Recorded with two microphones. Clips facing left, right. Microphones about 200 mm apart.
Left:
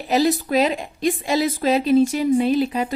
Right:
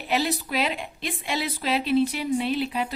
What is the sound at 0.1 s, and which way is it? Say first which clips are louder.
A woman's voice: left 8 dB; 45° left (ahead or behind).